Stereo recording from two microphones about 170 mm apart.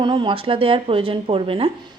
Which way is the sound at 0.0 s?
30° right (ahead or behind).